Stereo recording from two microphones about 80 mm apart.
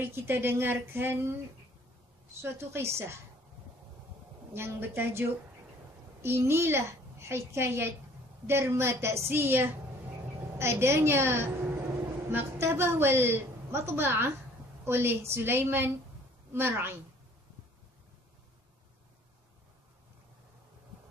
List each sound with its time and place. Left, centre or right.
0.0 s a woman's voice: right
2.4 s a woman's voice: right
4.6 s a woman's voice: right
6.2 s a woman's voice: right